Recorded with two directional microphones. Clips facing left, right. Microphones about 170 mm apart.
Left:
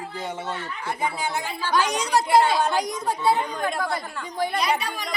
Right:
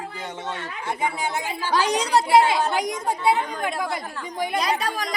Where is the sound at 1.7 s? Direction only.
35° right (ahead or behind).